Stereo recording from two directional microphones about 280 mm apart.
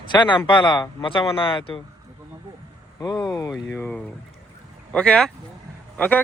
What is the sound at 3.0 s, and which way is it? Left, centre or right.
Speech, centre.